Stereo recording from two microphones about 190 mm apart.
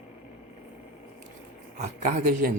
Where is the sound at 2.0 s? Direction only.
45° right (ahead or behind).